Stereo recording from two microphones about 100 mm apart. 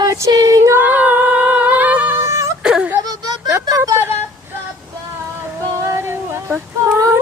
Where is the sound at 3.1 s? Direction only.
45° right (ahead or behind).